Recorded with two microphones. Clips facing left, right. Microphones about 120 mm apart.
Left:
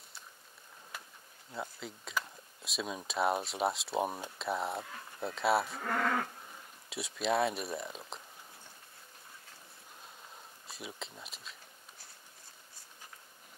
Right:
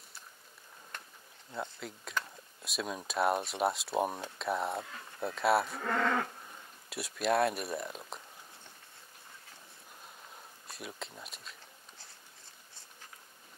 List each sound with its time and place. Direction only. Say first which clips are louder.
0.9 s a sound: even; 5° left (ahead or behind)
1.5 s speech: right 1 dB; centre (ahead or behind)
5.9 s livestock: right 2 dB; 30° right (ahead or behind)
6.9 s speech: right 2 dB; centre (ahead or behind)
10.7 s speech: right 1 dB; centre (ahead or behind)